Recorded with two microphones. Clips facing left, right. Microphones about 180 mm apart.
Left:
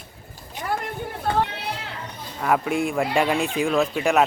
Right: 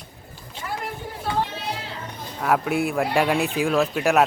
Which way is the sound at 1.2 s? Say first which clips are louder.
Left 2 dB; 60° left (ahead or behind).